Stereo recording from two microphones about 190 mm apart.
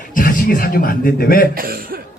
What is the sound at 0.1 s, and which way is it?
Speech, 45° left (ahead or behind).